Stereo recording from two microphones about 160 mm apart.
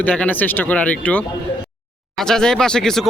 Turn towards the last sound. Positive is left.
turn(degrees=5)  # may be behind; listen again after turning